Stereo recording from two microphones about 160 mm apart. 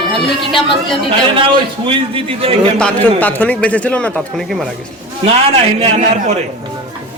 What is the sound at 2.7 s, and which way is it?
A man's voice, 10° left (ahead or behind).